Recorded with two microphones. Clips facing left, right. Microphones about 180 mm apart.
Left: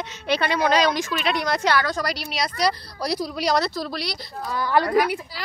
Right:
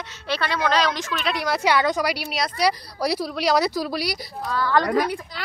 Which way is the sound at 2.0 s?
5° right (ahead or behind).